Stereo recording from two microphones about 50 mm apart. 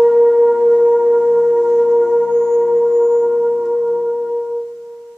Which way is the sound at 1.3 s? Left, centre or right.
Centre.